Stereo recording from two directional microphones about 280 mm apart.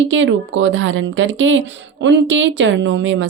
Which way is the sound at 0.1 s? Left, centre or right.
Right.